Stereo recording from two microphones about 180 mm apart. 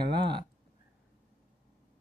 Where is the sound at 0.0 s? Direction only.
65° right (ahead or behind).